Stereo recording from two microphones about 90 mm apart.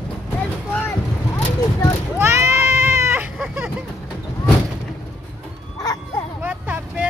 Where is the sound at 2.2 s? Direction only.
30° right (ahead or behind).